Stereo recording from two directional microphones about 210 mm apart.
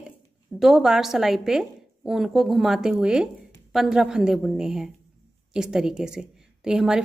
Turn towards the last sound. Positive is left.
turn(degrees=-5)  # may be behind; listen again after turning